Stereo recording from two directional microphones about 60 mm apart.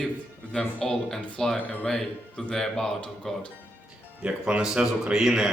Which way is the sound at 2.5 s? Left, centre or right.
Centre.